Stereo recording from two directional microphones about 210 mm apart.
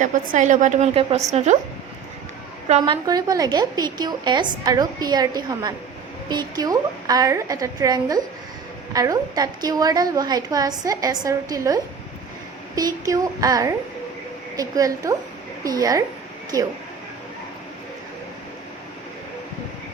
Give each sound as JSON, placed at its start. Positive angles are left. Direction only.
{"t": 0.0, "sound": "a woman's voice", "side_deg": -35}
{"t": 2.8, "sound": "a woman's voice", "side_deg": -20}